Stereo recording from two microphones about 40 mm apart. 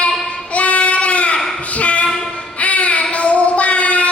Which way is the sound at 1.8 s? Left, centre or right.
Left.